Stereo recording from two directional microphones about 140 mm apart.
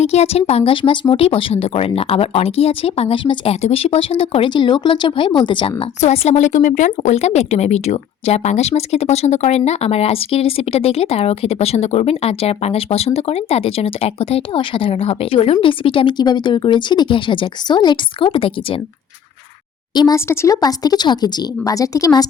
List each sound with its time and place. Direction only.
0.0 s speech: 50° left (ahead or behind)
19.9 s speech: 30° left (ahead or behind)
20.1 s speech: 20° left (ahead or behind)